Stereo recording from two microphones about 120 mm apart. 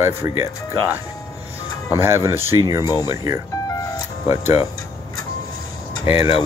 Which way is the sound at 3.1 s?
25° right (ahead or behind).